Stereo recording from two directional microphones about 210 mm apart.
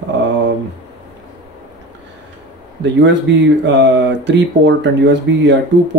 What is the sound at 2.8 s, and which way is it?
Speech, 55° right (ahead or behind).